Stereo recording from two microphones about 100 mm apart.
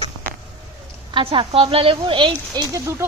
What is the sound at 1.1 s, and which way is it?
Speech, 55° right (ahead or behind).